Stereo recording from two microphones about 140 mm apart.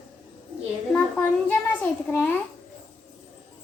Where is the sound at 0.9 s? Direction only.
5° left (ahead or behind).